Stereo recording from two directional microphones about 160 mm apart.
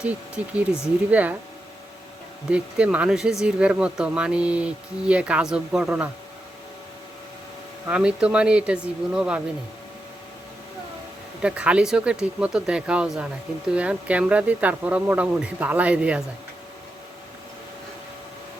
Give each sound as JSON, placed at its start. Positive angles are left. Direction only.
{"t": 0.4, "sound": "speech", "side_deg": -10}
{"t": 2.5, "sound": "speech", "side_deg": -5}
{"t": 7.9, "sound": "speech", "side_deg": -5}
{"t": 11.4, "sound": "speech", "side_deg": -5}